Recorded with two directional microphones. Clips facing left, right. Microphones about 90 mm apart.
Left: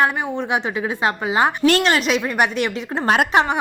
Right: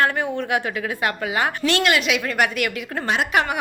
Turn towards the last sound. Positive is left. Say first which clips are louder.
# left 3 dB
turn(degrees=25)  # may be behind; listen again after turning